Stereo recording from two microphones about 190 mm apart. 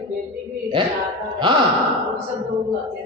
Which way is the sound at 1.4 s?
25° right (ahead or behind).